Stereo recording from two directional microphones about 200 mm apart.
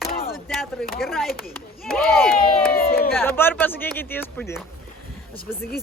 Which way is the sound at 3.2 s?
10° left (ahead or behind).